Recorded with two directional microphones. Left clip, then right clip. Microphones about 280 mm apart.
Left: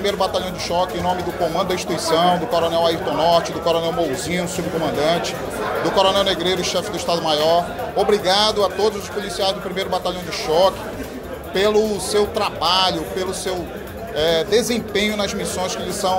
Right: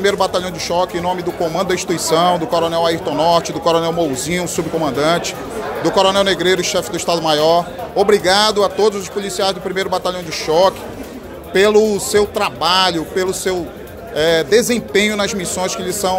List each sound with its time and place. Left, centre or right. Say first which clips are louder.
0.0 s speech: right 4 dB; right